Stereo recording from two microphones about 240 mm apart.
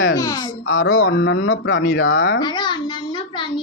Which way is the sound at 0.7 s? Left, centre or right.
Left.